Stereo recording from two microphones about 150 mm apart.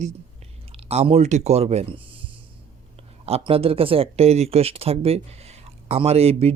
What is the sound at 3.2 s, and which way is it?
Speech, 40° right (ahead or behind).